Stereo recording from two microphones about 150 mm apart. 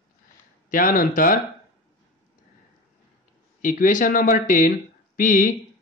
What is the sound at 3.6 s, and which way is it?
A man's voice, 65° left (ahead or behind).